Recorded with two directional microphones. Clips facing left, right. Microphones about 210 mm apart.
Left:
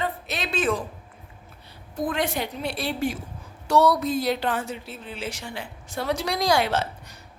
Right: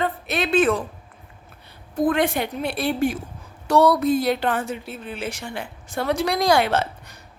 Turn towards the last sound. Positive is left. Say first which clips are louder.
# right 3 dB
turn(degrees=-55)  # may be behind; listen again after turning